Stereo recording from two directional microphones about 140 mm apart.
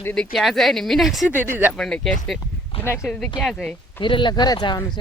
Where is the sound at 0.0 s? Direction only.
10° left (ahead or behind).